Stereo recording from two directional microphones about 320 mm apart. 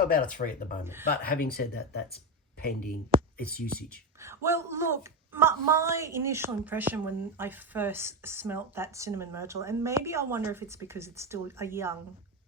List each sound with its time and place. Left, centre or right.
0.4 s speech: left
4.2 s a woman's voice: centre